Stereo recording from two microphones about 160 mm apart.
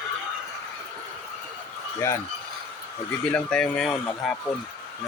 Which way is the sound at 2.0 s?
20° left (ahead or behind).